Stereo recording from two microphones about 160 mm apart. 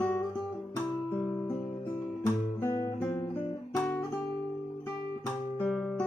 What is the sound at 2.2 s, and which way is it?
Guitar, 20° left (ahead or behind).